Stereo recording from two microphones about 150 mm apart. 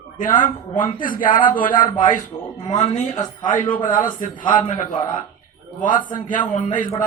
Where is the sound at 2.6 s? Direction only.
45° left (ahead or behind).